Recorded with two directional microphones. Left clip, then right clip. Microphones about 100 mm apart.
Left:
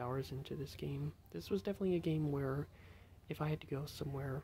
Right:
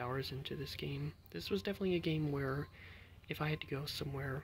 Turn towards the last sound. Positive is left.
turn(degrees=10)  # may be behind; listen again after turning